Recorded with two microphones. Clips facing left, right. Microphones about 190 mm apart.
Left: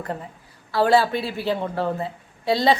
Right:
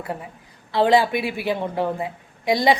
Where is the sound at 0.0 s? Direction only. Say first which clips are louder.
Even; 10° right (ahead or behind).